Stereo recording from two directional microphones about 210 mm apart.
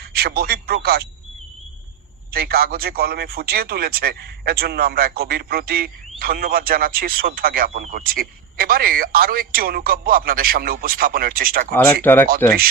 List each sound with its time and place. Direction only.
0.0 s speech: 50° right (ahead or behind)
2.3 s speech: 45° right (ahead or behind)
11.7 s speech: 10° left (ahead or behind)